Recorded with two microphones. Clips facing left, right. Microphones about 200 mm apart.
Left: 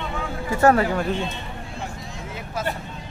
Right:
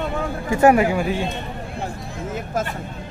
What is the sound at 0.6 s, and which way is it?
Speech, 15° right (ahead or behind).